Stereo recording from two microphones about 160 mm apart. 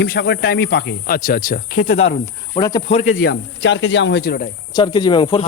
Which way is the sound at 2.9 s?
40° left (ahead or behind).